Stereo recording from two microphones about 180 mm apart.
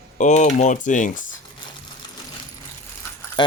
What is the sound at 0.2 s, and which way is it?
Speech, 40° left (ahead or behind).